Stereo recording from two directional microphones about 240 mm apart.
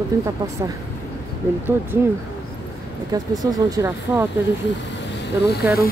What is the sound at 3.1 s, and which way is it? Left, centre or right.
Speech, centre.